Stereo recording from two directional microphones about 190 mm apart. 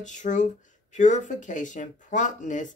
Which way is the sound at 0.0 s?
40° left (ahead or behind).